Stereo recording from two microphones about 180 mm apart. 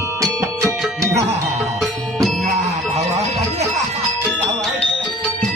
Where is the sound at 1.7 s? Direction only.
Centre (ahead or behind).